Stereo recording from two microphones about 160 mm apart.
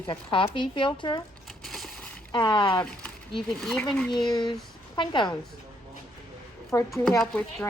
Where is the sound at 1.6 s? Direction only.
Centre (ahead or behind).